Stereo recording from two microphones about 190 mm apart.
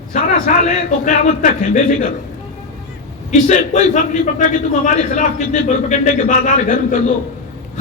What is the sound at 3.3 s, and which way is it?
A man's voice, 40° left (ahead or behind).